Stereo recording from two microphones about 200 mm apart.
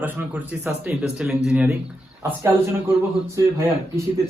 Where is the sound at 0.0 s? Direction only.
10° right (ahead or behind).